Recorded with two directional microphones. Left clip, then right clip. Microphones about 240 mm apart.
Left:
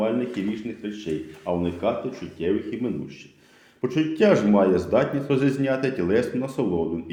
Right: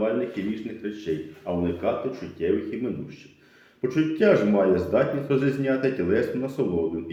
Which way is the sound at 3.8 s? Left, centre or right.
Left.